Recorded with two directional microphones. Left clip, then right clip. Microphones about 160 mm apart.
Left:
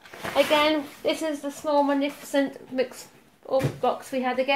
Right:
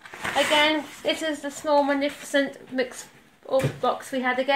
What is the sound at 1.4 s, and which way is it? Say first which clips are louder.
Speech: right 2 dB; 10° left (ahead or behind).